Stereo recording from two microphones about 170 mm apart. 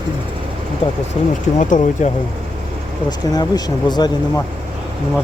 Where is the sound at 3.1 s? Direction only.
25° left (ahead or behind).